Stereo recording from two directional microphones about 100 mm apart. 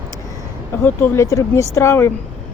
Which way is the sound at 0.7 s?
20° left (ahead or behind).